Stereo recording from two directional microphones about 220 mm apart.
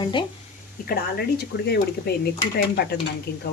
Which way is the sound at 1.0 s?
45° left (ahead or behind).